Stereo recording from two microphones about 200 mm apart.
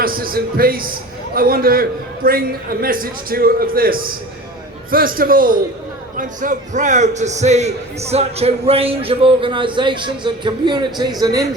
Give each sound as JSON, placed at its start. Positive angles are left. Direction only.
{"t": 0.0, "sound": "a man's voice", "side_deg": -45}